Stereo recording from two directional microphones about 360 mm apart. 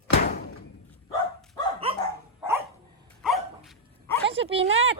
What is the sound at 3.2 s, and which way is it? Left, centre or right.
Dog, centre.